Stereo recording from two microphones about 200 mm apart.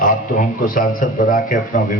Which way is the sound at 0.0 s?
40° left (ahead or behind).